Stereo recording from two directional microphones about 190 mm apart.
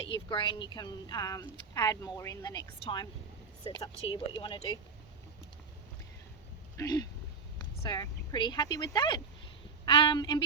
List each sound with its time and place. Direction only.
0.1 s speech: 25° left (ahead or behind)
6.7 s speech: 20° left (ahead or behind)